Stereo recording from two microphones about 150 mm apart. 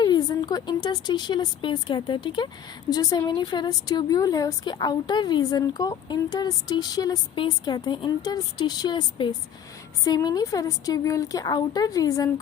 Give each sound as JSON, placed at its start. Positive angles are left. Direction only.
{"t": 0.0, "sound": "a woman's voice", "side_deg": 30}